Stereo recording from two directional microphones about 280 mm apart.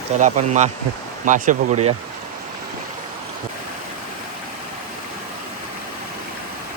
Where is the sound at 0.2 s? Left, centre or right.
Right.